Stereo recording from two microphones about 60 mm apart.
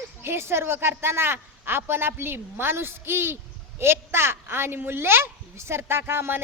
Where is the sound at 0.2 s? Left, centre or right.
Right.